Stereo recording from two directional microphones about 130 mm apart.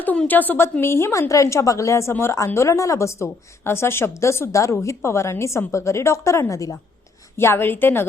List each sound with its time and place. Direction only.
0.0 s a woman's voice: 15° left (ahead or behind)